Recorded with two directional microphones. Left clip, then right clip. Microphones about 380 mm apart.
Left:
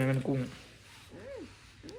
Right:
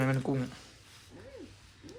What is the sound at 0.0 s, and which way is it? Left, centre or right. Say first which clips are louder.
Speech: even; centre.